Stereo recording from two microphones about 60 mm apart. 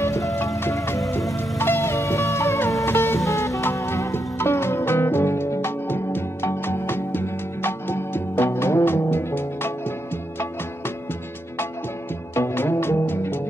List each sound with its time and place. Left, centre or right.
1.6 s music: left
2.8 s music: left
3.3 s music: left
4.1 s music: left
12.4 s music: left